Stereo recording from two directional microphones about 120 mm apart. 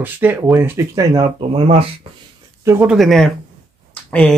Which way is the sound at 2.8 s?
Centre (ahead or behind).